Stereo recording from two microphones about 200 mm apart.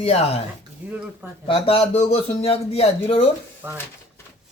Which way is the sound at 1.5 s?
30° left (ahead or behind).